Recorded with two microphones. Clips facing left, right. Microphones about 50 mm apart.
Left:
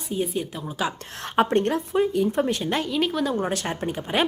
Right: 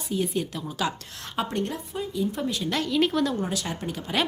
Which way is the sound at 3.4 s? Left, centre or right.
Left.